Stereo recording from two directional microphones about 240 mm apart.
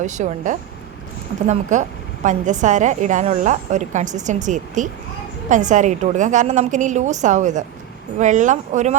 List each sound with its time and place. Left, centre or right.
0.0 s a woman's voice: right
1.7 s a woman's voice: right